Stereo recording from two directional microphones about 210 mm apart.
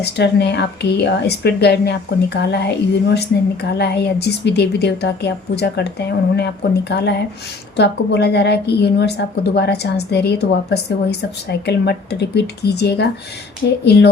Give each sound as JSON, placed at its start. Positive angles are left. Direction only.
{"t": 0.0, "sound": "speech", "side_deg": 50}